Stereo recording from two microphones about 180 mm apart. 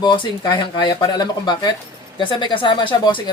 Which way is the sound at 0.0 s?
25° left (ahead or behind).